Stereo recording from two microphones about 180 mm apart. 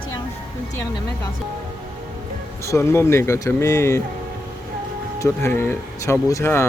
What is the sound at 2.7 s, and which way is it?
Speech, 15° left (ahead or behind).